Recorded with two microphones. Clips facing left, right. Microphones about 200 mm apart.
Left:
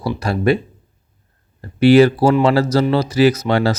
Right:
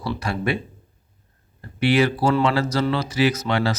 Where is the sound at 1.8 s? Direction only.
40° left (ahead or behind).